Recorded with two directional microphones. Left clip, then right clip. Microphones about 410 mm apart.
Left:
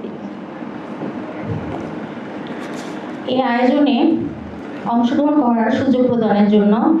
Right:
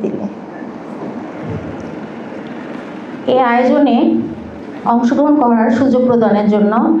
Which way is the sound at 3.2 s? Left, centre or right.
Right.